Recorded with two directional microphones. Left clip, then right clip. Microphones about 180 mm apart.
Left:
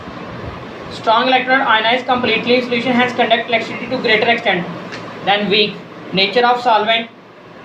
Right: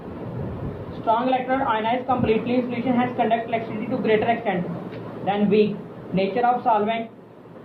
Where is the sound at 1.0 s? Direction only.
60° left (ahead or behind).